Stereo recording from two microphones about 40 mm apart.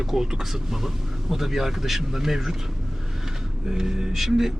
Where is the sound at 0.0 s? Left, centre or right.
Centre.